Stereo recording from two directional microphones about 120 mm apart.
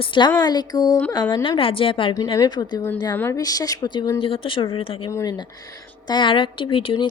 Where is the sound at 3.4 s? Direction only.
30° left (ahead or behind).